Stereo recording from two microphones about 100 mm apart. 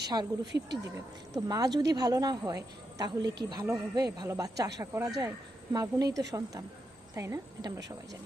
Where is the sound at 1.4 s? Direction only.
40° right (ahead or behind).